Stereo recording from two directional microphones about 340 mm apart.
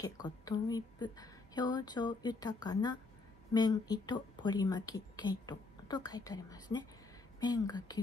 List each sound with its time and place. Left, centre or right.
0.0 s speech: centre